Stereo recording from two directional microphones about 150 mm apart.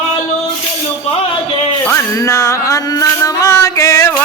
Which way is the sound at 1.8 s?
20° left (ahead or behind).